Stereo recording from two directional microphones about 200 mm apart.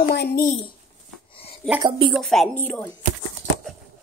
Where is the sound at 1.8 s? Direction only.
25° right (ahead or behind).